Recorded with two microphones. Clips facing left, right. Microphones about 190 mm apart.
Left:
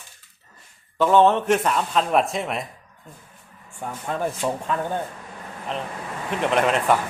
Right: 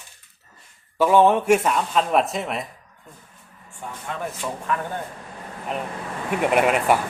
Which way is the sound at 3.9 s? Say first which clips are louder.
Left 4 dB; 40° left (ahead or behind).